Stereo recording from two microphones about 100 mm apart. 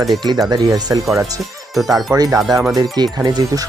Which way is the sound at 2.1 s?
35° right (ahead or behind).